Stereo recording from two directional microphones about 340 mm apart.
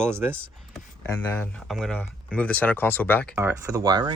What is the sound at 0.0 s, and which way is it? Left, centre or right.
Speech, centre.